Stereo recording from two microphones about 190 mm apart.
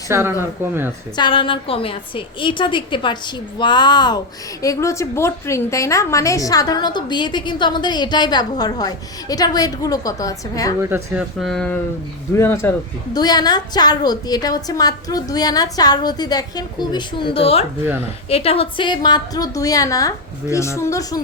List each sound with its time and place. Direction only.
0.1 s speech: 15° right (ahead or behind)
1.1 s a woman's voice: 25° left (ahead or behind)
10.8 s speech: 10° right (ahead or behind)
11.3 s a woman's voice: centre (ahead or behind); by 21.2 s 15° left (ahead or behind)